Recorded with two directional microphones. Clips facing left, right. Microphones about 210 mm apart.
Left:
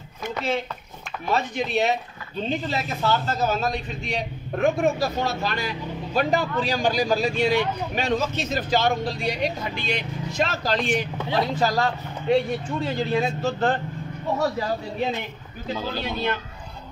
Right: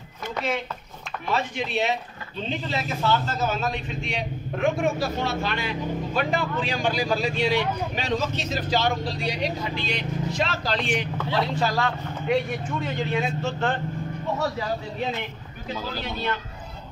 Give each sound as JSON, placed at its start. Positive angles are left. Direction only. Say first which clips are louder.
{"t": 1.3, "sound": "a man's voice", "louder": "left 3 dB", "side_deg": 40}
{"t": 15.7, "sound": "speech", "louder": "left 3 dB", "side_deg": 20}